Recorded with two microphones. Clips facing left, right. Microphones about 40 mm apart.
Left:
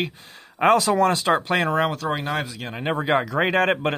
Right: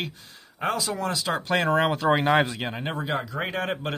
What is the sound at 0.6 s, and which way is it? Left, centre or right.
Speech, left.